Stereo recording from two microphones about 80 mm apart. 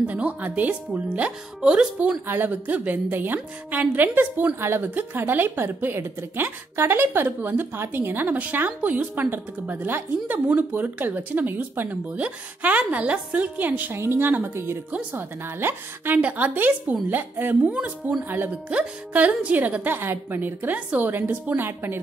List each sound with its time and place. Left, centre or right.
0.0 s speech: centre
2.2 s a woman's voice: right